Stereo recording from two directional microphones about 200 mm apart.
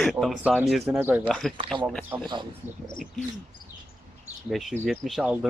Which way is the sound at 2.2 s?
25° right (ahead or behind).